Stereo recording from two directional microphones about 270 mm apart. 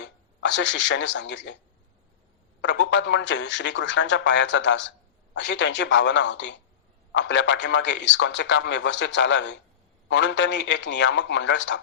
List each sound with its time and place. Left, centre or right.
0.0 s speech: left
2.6 s speech: left